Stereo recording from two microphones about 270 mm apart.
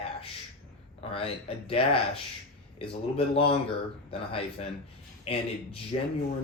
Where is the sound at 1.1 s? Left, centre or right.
Left.